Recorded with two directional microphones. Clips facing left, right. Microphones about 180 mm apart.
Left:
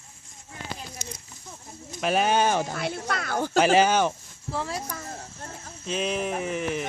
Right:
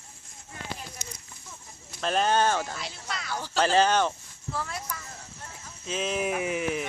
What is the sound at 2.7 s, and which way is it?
Speech, 55° left (ahead or behind).